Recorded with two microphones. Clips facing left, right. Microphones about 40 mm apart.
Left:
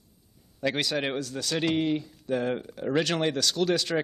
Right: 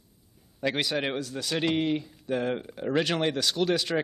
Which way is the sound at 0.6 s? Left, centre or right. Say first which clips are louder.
Even; centre.